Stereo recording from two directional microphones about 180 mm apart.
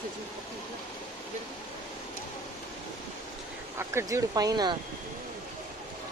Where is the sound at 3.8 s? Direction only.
15° right (ahead or behind).